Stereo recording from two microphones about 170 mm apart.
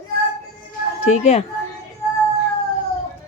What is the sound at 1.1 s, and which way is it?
Speech, 40° left (ahead or behind).